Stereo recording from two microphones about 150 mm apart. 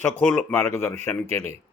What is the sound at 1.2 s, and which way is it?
Speech, 45° right (ahead or behind).